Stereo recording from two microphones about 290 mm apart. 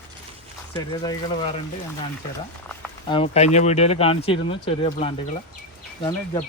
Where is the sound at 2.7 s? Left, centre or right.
Centre.